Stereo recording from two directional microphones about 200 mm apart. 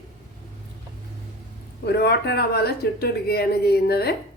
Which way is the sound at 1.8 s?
55° left (ahead or behind).